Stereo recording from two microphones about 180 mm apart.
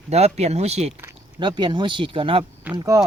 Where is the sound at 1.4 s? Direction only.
25° right (ahead or behind).